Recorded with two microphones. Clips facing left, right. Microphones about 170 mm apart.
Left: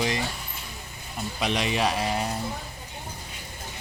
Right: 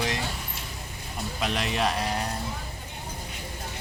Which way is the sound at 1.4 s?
Centre (ahead or behind).